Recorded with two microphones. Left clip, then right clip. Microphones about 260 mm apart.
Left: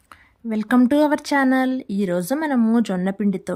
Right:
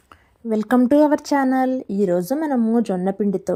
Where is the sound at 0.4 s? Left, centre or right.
Centre.